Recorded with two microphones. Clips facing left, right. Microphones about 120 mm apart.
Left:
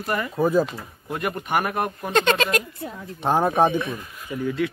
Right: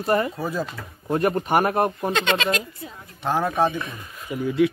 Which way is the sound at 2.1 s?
45° left (ahead or behind).